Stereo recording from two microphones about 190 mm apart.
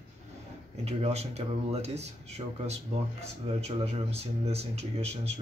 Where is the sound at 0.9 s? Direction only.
35° right (ahead or behind).